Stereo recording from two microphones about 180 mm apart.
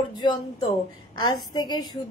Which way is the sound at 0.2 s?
25° left (ahead or behind).